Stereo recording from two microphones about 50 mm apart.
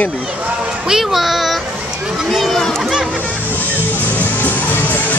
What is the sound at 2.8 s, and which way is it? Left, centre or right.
Music, centre.